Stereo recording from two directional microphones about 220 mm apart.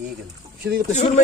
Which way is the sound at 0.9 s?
30° left (ahead or behind).